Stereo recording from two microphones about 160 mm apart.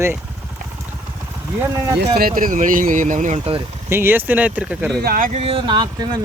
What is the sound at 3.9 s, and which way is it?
Speech, 15° right (ahead or behind).